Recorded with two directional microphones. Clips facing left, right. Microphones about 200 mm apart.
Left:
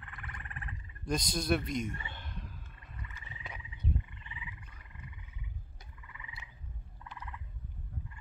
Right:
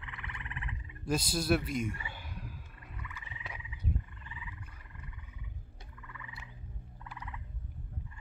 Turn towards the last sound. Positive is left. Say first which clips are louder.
# right 3 dB
turn(degrees=20)  # may be behind; listen again after turning